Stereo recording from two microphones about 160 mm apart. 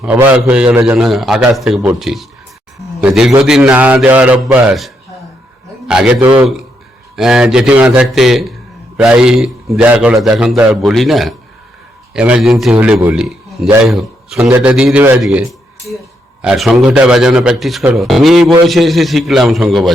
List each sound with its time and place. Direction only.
0.0 s a man's voice: 10° right (ahead or behind)
3.4 s speech: 5° right (ahead or behind)
5.9 s a man's voice: 5° right (ahead or behind)